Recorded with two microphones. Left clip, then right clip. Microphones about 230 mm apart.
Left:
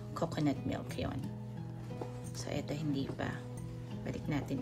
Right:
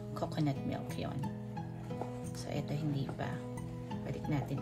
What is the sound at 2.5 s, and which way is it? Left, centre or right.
Music, left.